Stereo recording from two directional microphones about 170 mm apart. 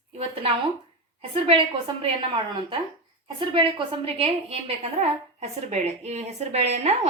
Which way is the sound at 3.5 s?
30° right (ahead or behind).